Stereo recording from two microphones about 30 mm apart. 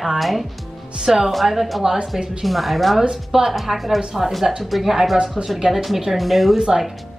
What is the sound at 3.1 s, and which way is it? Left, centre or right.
Speech, centre.